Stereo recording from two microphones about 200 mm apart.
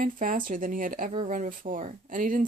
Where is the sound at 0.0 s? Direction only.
45° right (ahead or behind).